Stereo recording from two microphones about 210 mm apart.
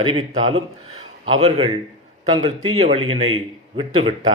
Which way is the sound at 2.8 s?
30° right (ahead or behind).